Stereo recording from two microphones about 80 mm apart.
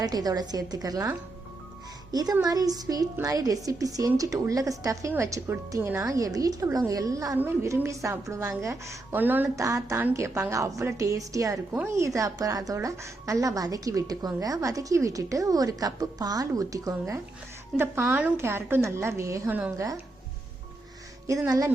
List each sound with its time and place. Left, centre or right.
0.0 s a woman's voice: right
2.4 s a woman's voice: right
6.0 s a woman's voice: right
7.3 s a woman's voice: right
9.1 s a woman's voice: right
9.6 s a woman's voice: right
17.7 s a woman's voice: right
19.5 s a woman's voice: right
19.7 s a woman's voice: right
21.4 s a woman's voice: right